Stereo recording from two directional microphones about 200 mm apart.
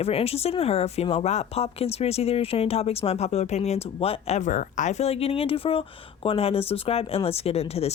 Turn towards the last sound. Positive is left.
turn(degrees=30)  # may be behind; listen again after turning